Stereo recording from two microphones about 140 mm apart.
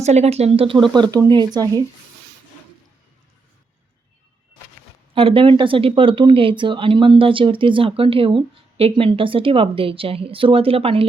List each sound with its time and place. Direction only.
0.0 s speech: 50° right (ahead or behind); by 1.8 s 30° right (ahead or behind)
5.1 s speech: 40° right (ahead or behind)